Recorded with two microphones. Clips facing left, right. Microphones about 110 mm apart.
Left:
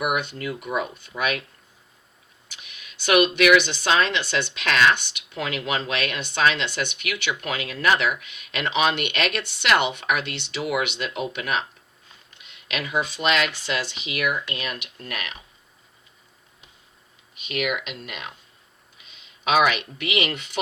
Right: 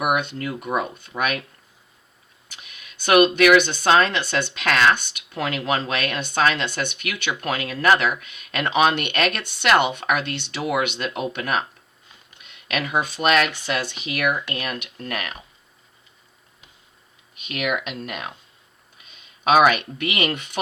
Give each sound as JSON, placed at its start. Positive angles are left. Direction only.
{"t": 0.0, "sound": "speech", "side_deg": -50}
{"t": 2.7, "sound": "a sound", "side_deg": -45}
{"t": 3.3, "sound": "speech", "side_deg": -45}
{"t": 12.3, "sound": "a sound", "side_deg": -10}
{"t": 12.6, "sound": "speech", "side_deg": -50}
{"t": 17.3, "sound": "speech", "side_deg": -45}